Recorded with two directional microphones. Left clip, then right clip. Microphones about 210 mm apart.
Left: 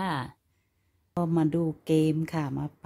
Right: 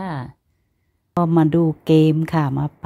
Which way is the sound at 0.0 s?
10° left (ahead or behind).